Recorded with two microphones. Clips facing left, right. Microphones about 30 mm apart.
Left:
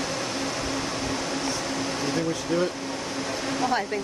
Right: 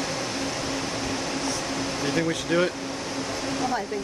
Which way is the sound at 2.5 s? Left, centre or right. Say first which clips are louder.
Right 2 dB; right.